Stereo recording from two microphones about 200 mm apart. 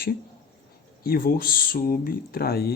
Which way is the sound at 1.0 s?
50° left (ahead or behind).